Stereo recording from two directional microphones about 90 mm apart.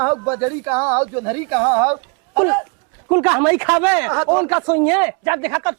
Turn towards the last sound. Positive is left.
turn(degrees=-20)  # may be behind; listen again after turning